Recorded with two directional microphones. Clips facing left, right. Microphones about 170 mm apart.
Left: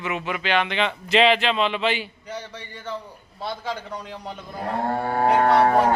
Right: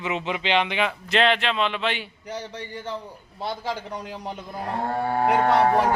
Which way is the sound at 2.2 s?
20° right (ahead or behind).